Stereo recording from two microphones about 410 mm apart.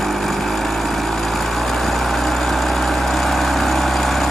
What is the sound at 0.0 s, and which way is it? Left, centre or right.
Lawn mower, centre.